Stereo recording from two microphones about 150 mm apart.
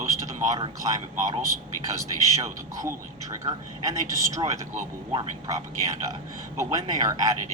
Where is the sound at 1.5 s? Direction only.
25° left (ahead or behind).